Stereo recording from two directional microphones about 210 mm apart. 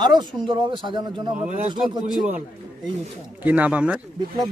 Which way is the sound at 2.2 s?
5° right (ahead or behind).